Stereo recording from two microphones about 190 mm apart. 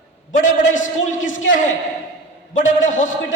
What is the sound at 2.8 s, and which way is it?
Speech, 40° left (ahead or behind).